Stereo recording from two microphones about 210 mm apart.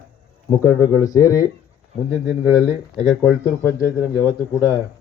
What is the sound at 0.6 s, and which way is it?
Speech, 15° left (ahead or behind).